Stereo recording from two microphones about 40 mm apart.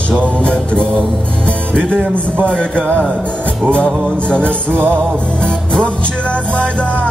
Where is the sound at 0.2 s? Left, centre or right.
Left.